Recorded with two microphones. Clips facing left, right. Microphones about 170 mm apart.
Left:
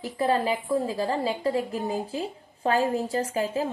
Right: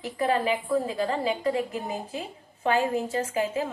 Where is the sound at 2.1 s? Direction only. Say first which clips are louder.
Left 4 dB; 35° left (ahead or behind).